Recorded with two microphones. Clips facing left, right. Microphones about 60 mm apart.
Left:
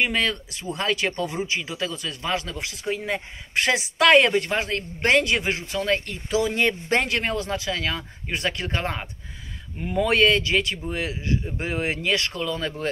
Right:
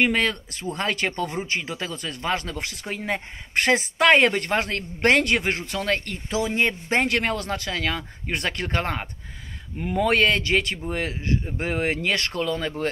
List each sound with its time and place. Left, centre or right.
0.0 s speech: right
6.3 s speech: right
7.1 s speech: right
9.8 s speech: right